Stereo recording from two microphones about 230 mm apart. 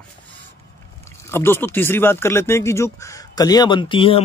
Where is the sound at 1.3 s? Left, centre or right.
Centre.